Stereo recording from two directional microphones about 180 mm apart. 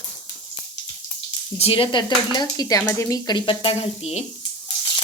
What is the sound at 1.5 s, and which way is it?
Speech, 30° left (ahead or behind).